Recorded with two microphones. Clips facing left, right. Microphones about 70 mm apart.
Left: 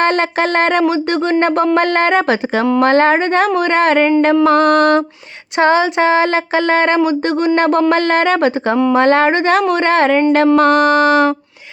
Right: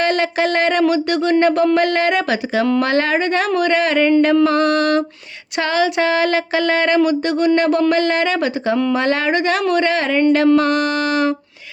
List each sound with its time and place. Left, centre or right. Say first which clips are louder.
0.0 s speech: left 3 dB; left
4.4 s mantra: left 5 dB; left
5.5 s speech: left 5 dB; left